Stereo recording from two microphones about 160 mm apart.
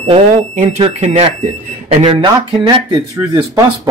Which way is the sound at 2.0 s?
25° right (ahead or behind).